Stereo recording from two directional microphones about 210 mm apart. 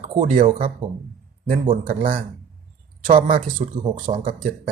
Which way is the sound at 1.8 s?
40° right (ahead or behind).